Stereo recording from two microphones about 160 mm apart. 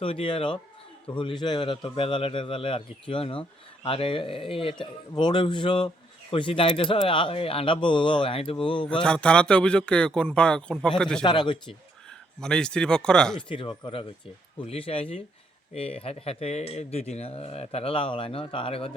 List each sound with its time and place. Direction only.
0.0 s speech: 35° left (ahead or behind)
8.9 s speech: 5° left (ahead or behind)
11.2 s speech: 30° left (ahead or behind)
12.4 s speech: 5° left (ahead or behind)
13.5 s speech: 30° left (ahead or behind)